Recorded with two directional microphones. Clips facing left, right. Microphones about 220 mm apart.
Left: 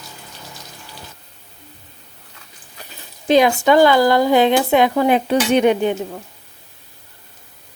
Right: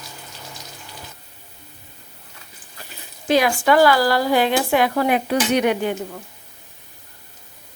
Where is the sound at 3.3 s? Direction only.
20° left (ahead or behind).